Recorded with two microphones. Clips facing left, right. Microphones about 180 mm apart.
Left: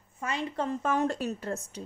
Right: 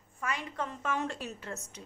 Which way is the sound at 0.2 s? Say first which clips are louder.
Left 4 dB; 25° left (ahead or behind).